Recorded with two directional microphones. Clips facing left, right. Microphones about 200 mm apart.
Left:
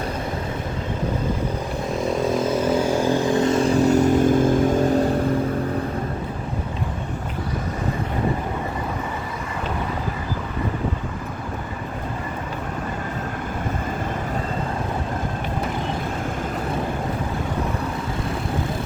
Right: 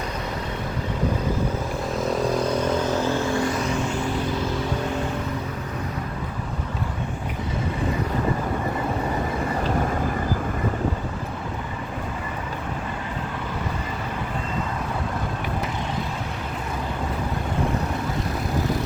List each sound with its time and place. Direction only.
1.9 s vehicle: centre (ahead or behind); by 5.0 s 45° left (ahead or behind)